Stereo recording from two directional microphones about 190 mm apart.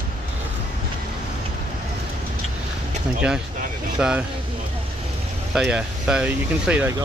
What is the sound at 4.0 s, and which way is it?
Speech, 5° right (ahead or behind).